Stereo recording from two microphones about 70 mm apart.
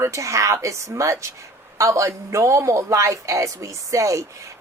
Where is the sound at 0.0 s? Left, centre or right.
Right.